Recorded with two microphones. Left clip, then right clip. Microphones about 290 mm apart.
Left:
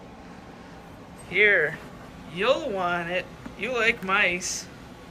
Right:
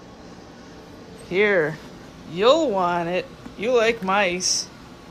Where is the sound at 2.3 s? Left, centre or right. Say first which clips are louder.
Right 7 dB; centre.